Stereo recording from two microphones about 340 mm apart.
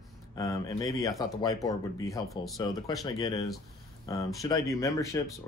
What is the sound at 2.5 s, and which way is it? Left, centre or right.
Speech, centre.